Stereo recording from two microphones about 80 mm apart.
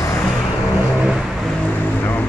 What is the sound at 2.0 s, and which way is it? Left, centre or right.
Vehicle, left.